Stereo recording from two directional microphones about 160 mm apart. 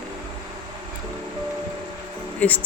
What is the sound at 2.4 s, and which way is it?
Speech, 10° left (ahead or behind).